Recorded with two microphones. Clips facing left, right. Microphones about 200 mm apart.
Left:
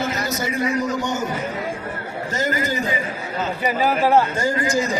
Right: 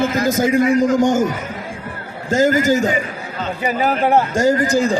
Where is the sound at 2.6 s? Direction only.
45° right (ahead or behind).